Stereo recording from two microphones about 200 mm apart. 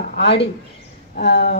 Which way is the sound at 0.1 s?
55° left (ahead or behind).